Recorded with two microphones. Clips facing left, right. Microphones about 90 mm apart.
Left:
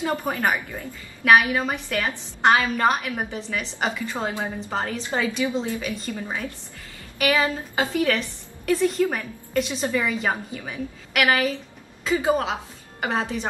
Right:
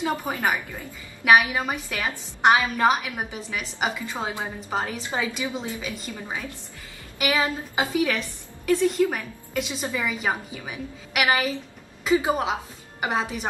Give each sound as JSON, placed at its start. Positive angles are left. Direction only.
{"t": 0.3, "sound": "a woman's voice", "side_deg": -10}
{"t": 7.2, "sound": "a woman's voice", "side_deg": -15}